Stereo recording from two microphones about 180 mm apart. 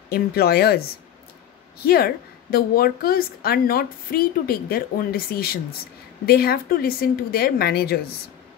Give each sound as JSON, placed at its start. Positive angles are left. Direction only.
{"t": 0.1, "sound": "a woman's voice", "side_deg": 60}